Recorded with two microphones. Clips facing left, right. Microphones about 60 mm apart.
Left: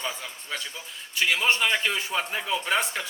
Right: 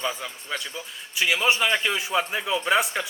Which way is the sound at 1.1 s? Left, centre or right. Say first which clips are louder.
Right 1 dB; centre.